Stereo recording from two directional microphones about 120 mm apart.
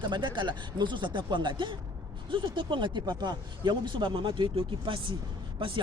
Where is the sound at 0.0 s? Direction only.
40° right (ahead or behind).